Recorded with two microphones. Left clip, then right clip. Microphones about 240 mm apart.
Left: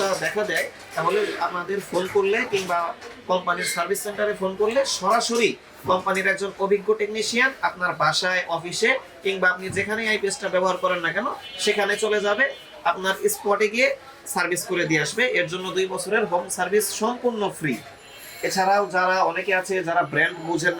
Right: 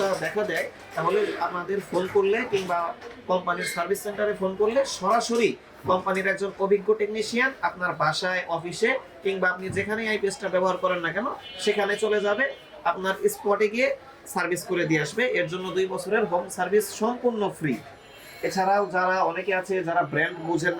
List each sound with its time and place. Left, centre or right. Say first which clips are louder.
0.0 s speech: left 2 dB; centre